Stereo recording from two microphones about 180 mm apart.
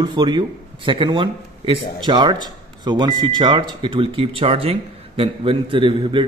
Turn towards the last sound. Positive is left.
turn(degrees=-30)  # may be behind; listen again after turning